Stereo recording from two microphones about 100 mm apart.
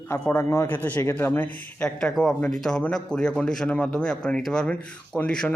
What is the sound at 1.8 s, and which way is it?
Speech, 5° left (ahead or behind).